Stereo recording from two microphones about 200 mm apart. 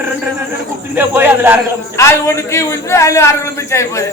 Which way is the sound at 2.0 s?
15° left (ahead or behind).